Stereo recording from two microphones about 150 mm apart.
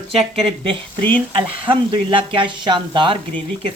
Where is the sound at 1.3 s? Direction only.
35° right (ahead or behind).